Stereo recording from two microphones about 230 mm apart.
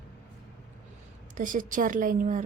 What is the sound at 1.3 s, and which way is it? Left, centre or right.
A woman's voice, right.